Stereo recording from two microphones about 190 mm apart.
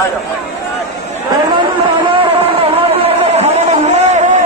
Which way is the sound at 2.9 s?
30° right (ahead or behind).